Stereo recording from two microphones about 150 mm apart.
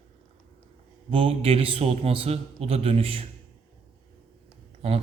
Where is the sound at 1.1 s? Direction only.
40° right (ahead or behind).